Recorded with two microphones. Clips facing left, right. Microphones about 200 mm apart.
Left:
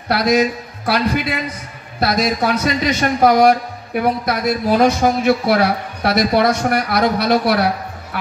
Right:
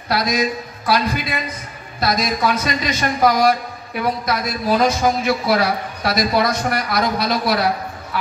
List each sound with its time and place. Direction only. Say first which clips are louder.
0.1 s a man's voice: left 4 dB; 65° left (ahead or behind)